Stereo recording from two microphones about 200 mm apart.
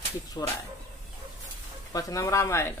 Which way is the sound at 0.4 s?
20° left (ahead or behind).